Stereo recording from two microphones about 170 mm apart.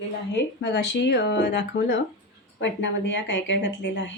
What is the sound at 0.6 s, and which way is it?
Speech, 90° left.